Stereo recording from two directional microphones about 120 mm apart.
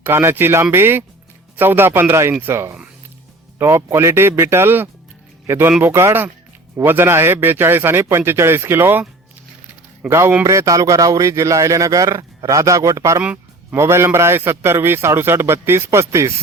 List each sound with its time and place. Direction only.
0.0 s a man's voice: 20° right (ahead or behind)
10.1 s a man's voice: 20° right (ahead or behind)
13.2 s music: 10° right (ahead or behind)
13.7 s a man's voice: 20° right (ahead or behind)